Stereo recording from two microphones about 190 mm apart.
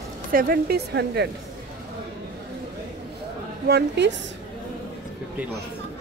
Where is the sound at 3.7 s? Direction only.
60° right (ahead or behind).